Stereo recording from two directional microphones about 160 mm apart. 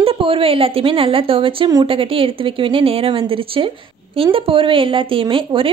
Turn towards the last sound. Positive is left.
turn(degrees=-30)  # may be behind; listen again after turning